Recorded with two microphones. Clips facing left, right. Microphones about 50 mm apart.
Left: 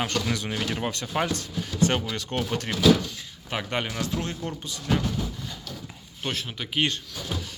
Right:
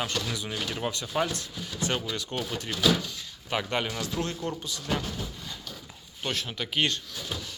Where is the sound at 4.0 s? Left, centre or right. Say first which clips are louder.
Left 1 dB; left.